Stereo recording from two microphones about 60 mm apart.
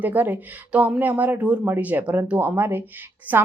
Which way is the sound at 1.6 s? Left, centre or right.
Right.